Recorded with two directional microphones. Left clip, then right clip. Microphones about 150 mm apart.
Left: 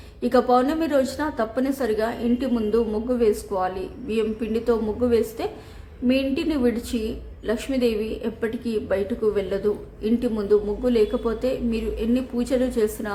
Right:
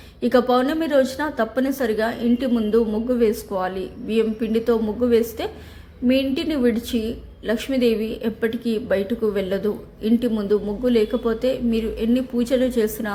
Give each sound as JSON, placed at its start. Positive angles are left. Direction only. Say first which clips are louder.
{"t": 0.2, "sound": "a woman's voice", "louder": "right 1 dB", "side_deg": -15}